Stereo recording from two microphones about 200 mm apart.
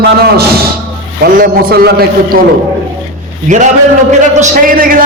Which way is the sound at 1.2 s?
50° right (ahead or behind).